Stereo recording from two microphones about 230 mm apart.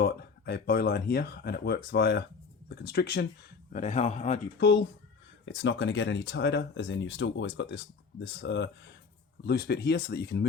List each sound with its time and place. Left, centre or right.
0.0 s speech: left
3.7 s a man's voice: left
4.6 s speech: left